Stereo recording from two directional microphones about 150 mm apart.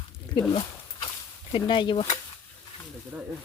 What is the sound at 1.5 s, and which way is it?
Speech, 30° left (ahead or behind).